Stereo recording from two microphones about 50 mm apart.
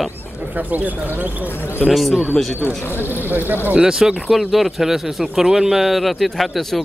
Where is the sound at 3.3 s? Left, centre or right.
Right.